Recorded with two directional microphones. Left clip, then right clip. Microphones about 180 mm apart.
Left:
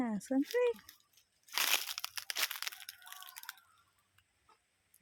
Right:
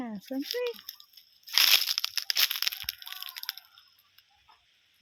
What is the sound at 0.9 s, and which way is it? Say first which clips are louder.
Speech: right 14 dB; 10° right (ahead or behind).